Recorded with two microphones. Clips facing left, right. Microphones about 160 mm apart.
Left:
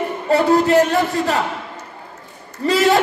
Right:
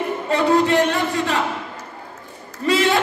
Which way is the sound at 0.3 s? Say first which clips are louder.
Left 3 dB; 40° left (ahead or behind).